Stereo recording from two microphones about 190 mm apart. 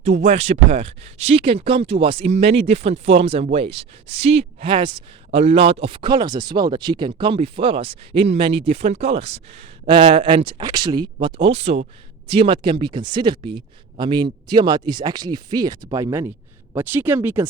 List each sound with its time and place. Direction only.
0.0 s speech: 35° right (ahead or behind); by 17.5 s 10° right (ahead or behind)